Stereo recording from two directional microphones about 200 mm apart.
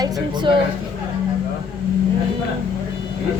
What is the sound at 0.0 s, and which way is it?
Speech, 25° right (ahead or behind).